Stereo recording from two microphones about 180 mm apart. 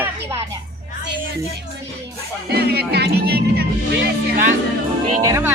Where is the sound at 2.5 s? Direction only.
60° right (ahead or behind).